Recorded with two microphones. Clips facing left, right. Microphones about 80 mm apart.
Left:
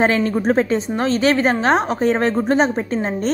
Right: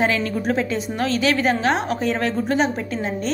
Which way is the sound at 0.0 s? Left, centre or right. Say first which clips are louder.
Left 4 dB; left.